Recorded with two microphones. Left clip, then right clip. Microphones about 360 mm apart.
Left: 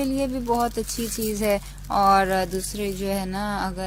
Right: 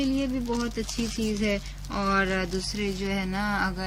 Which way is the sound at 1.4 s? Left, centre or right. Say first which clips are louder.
Left 6 dB; centre.